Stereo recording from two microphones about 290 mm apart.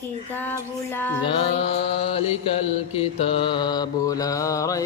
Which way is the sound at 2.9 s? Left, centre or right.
Centre.